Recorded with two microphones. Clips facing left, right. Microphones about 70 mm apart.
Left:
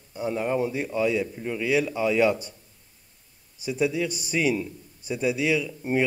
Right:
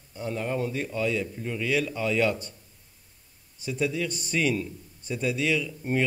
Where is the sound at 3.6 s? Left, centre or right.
Centre.